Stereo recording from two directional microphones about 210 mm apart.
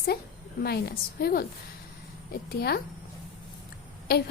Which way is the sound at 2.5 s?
50° left (ahead or behind).